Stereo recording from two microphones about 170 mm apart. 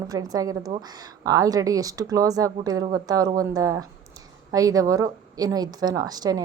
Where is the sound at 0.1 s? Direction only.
20° right (ahead or behind).